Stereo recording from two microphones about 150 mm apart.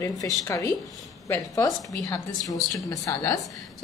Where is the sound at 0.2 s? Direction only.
20° left (ahead or behind).